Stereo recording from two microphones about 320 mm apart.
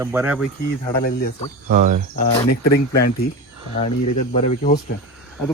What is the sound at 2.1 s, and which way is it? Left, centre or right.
Speech, left.